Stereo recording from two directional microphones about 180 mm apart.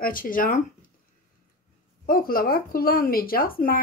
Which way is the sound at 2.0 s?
55° left (ahead or behind).